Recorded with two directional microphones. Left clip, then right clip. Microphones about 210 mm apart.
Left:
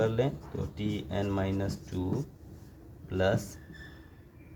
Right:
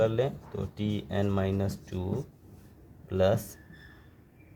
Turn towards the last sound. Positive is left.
turn(degrees=-55)  # may be behind; listen again after turning